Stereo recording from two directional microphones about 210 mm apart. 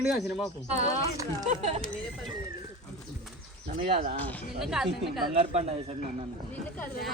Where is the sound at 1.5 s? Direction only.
30° right (ahead or behind).